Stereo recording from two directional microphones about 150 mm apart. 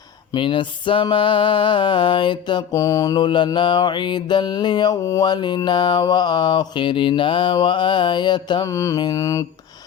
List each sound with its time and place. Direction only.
0.3 s music: 35° left (ahead or behind)